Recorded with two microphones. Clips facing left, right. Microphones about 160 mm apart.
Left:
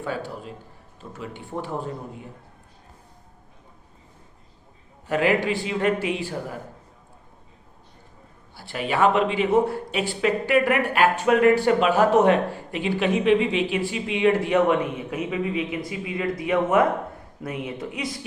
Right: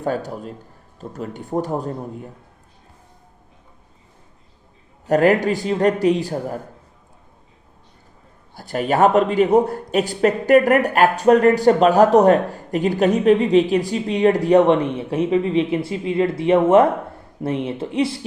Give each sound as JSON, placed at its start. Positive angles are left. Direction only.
{"t": 0.0, "sound": "speech", "side_deg": -45}
{"t": 5.0, "sound": "speech", "side_deg": -45}
{"t": 8.5, "sound": "speech", "side_deg": -45}